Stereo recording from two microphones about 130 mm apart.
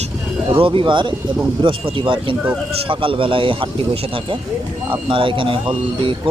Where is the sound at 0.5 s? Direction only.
40° right (ahead or behind).